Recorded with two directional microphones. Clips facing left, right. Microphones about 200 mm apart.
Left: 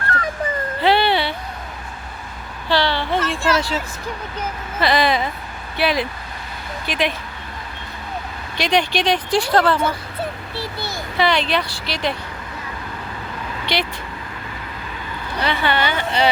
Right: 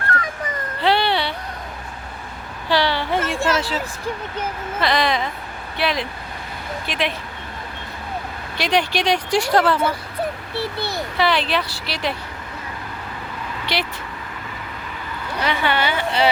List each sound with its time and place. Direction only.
0.1 s dog: 30° left (ahead or behind)
0.8 s a sound: centre (ahead or behind)
2.6 s a sound: 10° right (ahead or behind)
3.2 s speech: 45° right (ahead or behind)
4.8 s speech: 5° left (ahead or behind)
8.5 s speech: 5° right (ahead or behind)
10.6 s a child's voice: 60° right (ahead or behind)
11.2 s speech: 5° right (ahead or behind)
13.7 s speech: 5° right (ahead or behind)
15.4 s speech: 10° right (ahead or behind)